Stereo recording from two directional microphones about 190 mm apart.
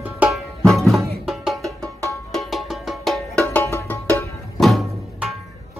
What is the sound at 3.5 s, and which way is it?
Music, 15° left (ahead or behind).